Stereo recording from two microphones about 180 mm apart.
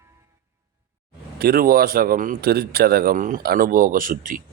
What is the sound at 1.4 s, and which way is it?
A man's voice, 55° right (ahead or behind).